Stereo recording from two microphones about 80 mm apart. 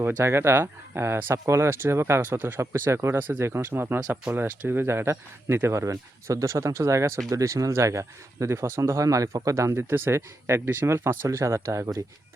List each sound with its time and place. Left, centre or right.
0.2 s speech: right
8.8 s speech: right